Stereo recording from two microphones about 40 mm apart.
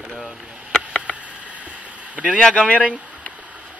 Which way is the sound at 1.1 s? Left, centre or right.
Right.